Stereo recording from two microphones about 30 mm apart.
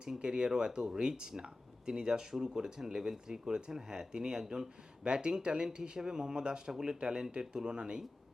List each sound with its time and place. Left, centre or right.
0.2 s speech: right
5.0 s speech: right
6.0 s speech: right